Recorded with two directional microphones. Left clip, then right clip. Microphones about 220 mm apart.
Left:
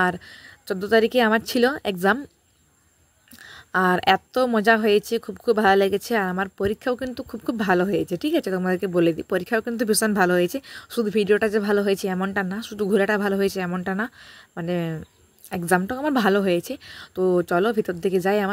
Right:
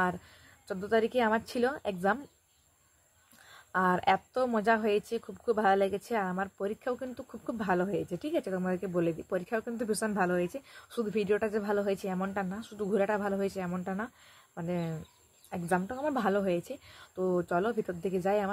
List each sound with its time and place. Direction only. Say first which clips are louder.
0.0 s a woman's voice: left 9 dB; 40° left (ahead or behind)
3.4 s a woman's voice: left 8 dB; 40° left (ahead or behind)